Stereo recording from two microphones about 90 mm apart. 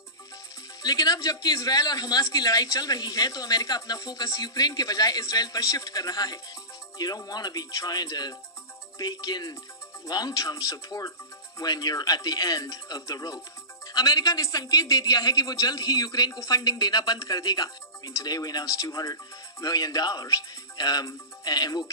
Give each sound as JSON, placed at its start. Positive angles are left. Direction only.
{"t": 0.8, "sound": "speech", "side_deg": 45}